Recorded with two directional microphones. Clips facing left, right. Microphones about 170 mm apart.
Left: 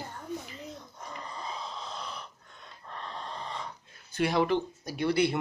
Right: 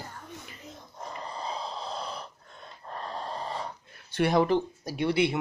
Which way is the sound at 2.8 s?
40° right (ahead or behind).